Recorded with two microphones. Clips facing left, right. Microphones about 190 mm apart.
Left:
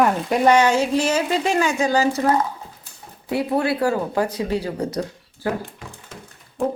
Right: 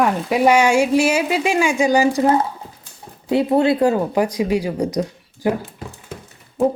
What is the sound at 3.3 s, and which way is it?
Speech, 25° right (ahead or behind).